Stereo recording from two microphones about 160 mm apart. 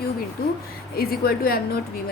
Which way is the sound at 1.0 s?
70° left (ahead or behind).